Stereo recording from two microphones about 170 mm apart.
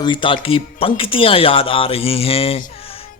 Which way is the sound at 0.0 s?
30° left (ahead or behind).